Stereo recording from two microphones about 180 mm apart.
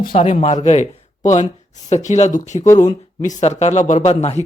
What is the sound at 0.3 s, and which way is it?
Speech, 35° left (ahead or behind).